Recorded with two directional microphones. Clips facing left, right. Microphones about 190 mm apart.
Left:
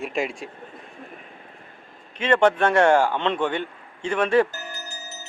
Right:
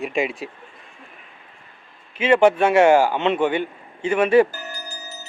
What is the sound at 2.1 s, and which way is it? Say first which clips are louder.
Speech: right 3 dB; 5° right (ahead or behind).